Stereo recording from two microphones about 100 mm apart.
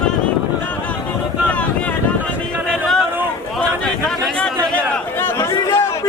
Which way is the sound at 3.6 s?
10° left (ahead or behind).